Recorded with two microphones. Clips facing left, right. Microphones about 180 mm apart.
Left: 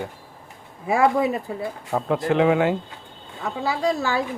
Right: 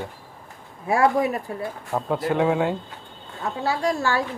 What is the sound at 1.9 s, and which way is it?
Speech, 80° left.